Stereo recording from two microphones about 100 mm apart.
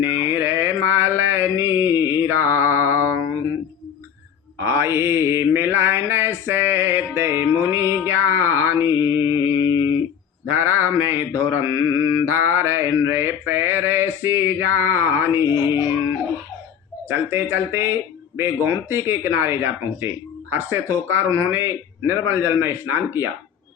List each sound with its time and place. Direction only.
0.0 s mantra: 25° right (ahead or behind)
4.6 s mantra: 25° right (ahead or behind)
8.0 s music: 25° right (ahead or behind)
9.0 s mantra: 25° right (ahead or behind)
17.1 s speech: 20° right (ahead or behind)